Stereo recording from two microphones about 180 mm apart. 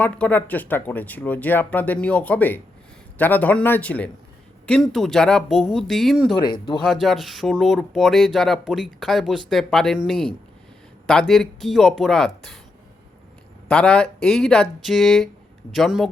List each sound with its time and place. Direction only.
0.0 s speech: 10° left (ahead or behind)
6.4 s speech: 25° left (ahead or behind)
6.8 s speech: centre (ahead or behind)
13.7 s speech: 5° left (ahead or behind)